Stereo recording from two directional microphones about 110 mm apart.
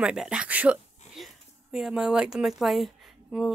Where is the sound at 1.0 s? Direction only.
90° left.